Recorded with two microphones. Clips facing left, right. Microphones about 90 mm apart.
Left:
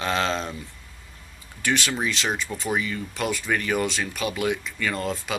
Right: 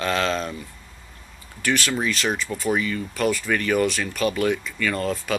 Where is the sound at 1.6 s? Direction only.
20° left (ahead or behind).